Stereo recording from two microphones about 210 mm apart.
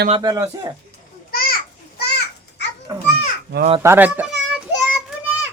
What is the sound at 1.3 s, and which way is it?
Children playing, 45° left (ahead or behind).